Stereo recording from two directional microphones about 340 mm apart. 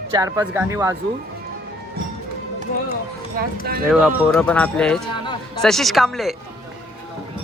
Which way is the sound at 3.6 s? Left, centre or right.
Right.